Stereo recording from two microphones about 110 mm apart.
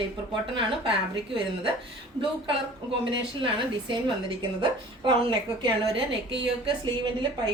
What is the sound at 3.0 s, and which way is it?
A woman's voice, 50° right (ahead or behind).